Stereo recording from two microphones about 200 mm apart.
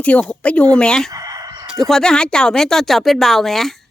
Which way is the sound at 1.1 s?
15° right (ahead or behind).